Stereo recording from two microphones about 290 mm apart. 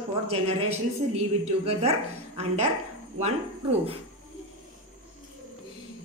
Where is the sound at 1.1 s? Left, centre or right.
Right.